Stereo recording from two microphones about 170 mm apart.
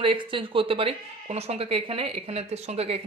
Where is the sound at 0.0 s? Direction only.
30° right (ahead or behind).